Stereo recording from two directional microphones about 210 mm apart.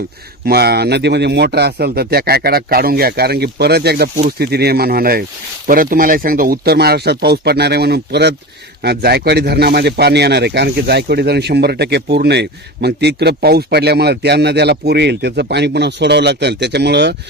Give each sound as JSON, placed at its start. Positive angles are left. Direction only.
{"t": 0.4, "sound": "speech", "side_deg": -50}